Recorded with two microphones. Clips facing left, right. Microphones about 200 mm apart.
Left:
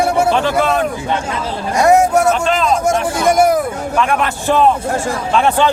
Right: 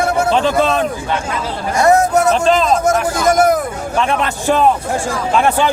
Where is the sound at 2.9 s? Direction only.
30° left (ahead or behind).